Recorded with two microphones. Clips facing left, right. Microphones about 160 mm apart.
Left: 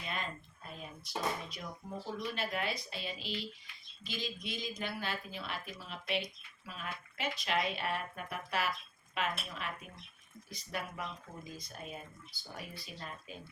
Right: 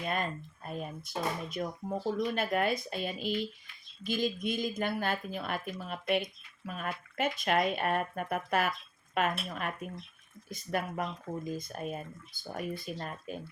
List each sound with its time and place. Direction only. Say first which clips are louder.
0.0 s speech: right 7 dB; 50° right (ahead or behind)